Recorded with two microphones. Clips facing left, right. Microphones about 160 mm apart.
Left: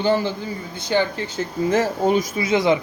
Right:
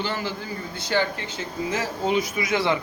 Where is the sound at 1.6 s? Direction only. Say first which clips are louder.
Left 7 dB; 45° left (ahead or behind).